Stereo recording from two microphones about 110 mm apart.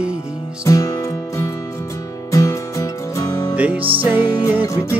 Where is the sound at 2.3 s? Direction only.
30° left (ahead or behind).